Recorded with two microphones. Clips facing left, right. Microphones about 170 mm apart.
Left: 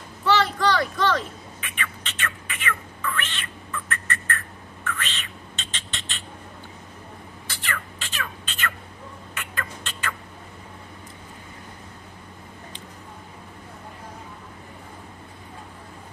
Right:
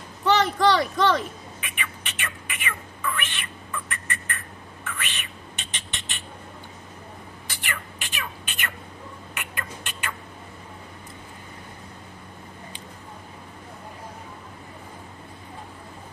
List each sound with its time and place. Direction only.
0.2 s a sound: 20° right (ahead or behind)
3.2 s cat: 15° right (ahead or behind)
3.9 s bird: 15° right (ahead or behind)
4.8 s a sound: 15° right (ahead or behind)
7.4 s bird: 15° right (ahead or behind)
9.3 s rodents: 15° right (ahead or behind)